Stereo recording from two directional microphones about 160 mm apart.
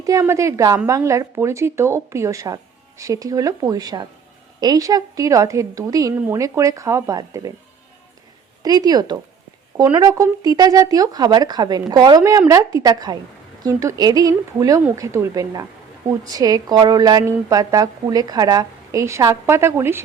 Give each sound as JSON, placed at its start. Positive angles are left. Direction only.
{"t": 0.0, "sound": "a woman's voice", "side_deg": -20}
{"t": 8.6, "sound": "a woman's voice", "side_deg": -25}